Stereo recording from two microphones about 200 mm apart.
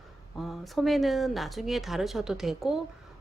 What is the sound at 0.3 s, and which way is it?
A woman's voice, centre (ahead or behind).